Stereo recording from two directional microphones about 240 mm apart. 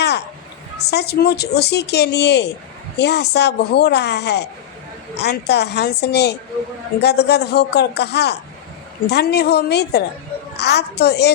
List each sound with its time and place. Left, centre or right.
0.9 s speech: left